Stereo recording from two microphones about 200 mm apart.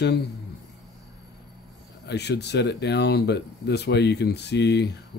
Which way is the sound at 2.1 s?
55° left (ahead or behind).